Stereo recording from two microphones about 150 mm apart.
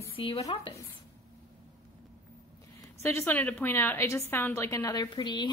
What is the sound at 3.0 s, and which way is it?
A woman's voice, 15° left (ahead or behind).